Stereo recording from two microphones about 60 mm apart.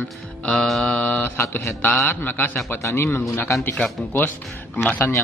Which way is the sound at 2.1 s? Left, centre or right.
Left.